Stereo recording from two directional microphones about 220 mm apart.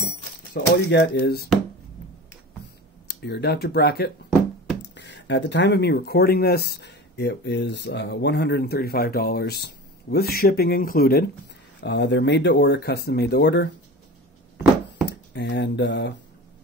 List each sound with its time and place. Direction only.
0.5 s speech: 50° left (ahead or behind)
3.1 s speech: 45° left (ahead or behind)
15.3 s speech: 50° left (ahead or behind)